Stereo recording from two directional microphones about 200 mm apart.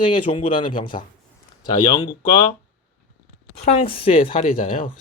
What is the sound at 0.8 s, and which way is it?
Speech, 45° left (ahead or behind).